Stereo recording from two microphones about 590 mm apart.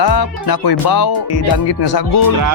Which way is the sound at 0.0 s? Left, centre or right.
Left.